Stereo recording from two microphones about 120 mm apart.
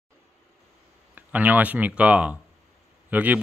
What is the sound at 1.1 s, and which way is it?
Speech, 15° right (ahead or behind).